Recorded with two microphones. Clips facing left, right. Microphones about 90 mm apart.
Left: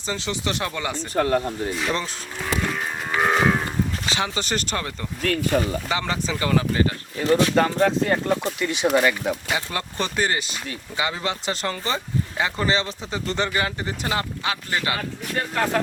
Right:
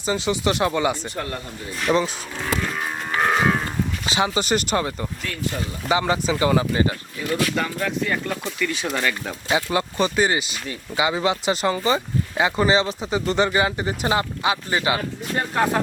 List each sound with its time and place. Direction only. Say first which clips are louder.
0.0 s speech: right 5 dB; 15° right (ahead or behind)
1.1 s speech: left 9 dB; 50° left (ahead or behind)
1.7 s speech: right 8 dB; centre (ahead or behind)
4.1 s speech: right 4 dB; 10° right (ahead or behind)
5.2 s speech: left 8 dB; 55° left (ahead or behind)
5.9 s speech: right 5 dB; 15° right (ahead or behind)
7.3 s speech: left 5 dB; 25° left (ahead or behind)
7.5 s speech: left 6 dB; 40° left (ahead or behind); by 9.4 s 15° left (ahead or behind)
9.5 s speech: right 5 dB; 15° right (ahead or behind)